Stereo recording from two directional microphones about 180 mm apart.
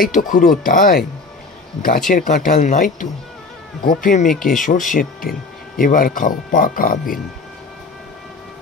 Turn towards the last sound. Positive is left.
turn(degrees=50)  # may be behind; listen again after turning